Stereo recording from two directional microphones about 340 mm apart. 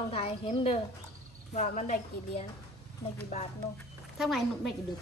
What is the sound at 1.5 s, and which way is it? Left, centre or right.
Speech, left.